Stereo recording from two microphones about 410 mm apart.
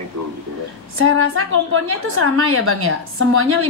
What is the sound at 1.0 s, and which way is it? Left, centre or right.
A woman's voice, right.